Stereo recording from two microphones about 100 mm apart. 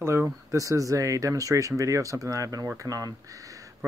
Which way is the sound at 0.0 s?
25° right (ahead or behind).